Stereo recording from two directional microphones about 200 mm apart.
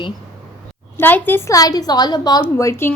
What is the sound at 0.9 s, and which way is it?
A woman's voice, 10° left (ahead or behind).